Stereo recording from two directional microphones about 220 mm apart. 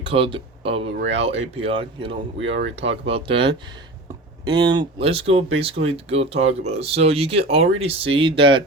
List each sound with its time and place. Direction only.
0.1 s speech: 25° right (ahead or behind)
2.6 s speech: 55° right (ahead or behind)
3.1 s speech: 25° right (ahead or behind)